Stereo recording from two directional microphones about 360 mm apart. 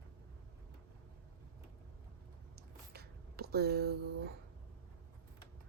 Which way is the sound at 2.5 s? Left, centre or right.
Right.